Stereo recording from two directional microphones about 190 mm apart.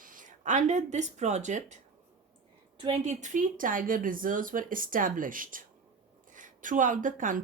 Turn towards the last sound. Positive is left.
turn(degrees=-45)  # may be behind; listen again after turning